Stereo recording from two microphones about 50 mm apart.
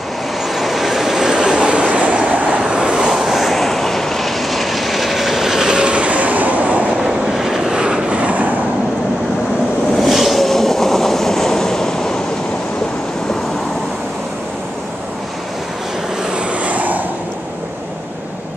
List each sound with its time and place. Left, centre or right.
0.6 s vehicle: centre
1.7 s vehicle: right
3.1 s vehicle: centre; by 6.9 s right
7.0 s vehicle: centre
7.8 s vehicle: centre
10.0 s train: centre
16.6 s vehicle: right